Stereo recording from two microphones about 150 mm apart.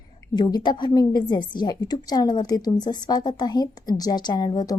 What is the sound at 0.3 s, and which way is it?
A woman's voice, 25° left (ahead or behind).